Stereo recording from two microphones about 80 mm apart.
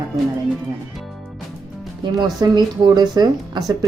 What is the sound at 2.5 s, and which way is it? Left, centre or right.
Speech, right.